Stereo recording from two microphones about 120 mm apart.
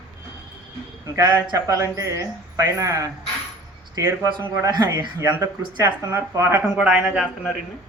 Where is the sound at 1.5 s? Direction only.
30° right (ahead or behind).